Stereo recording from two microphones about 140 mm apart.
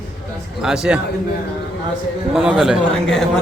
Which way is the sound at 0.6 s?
5° right (ahead or behind).